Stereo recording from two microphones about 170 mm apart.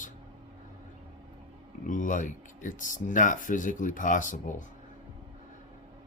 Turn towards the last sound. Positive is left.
turn(degrees=50)  # may be behind; listen again after turning